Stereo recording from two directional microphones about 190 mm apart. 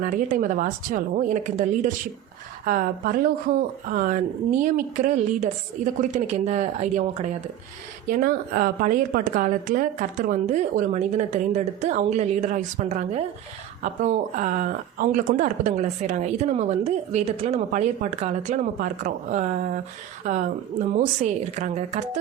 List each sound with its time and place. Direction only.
0.0 s speech: 45° right (ahead or behind)
8.0 s speech: 50° right (ahead or behind)